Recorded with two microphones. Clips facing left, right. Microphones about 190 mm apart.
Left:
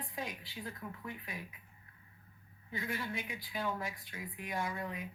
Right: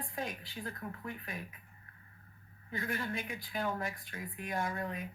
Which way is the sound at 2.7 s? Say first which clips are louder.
Right 2 dB; 50° right (ahead or behind).